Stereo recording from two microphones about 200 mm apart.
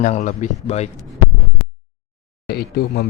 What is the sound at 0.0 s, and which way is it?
Speech, 40° left (ahead or behind).